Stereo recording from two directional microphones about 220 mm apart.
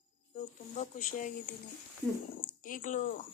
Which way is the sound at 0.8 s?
35° left (ahead or behind).